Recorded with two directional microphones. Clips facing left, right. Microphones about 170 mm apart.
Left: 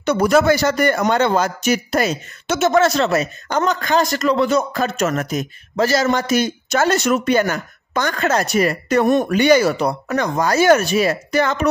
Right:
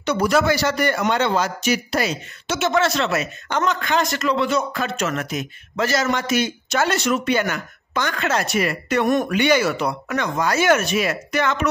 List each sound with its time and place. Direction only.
0.0 s a man's voice: 50° left (ahead or behind)